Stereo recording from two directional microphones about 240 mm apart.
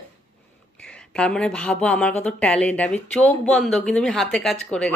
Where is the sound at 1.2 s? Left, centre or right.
Centre.